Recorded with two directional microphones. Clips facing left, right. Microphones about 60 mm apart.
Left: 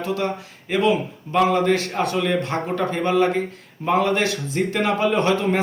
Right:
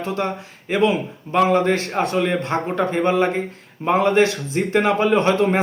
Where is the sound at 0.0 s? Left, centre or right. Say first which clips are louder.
Even; right.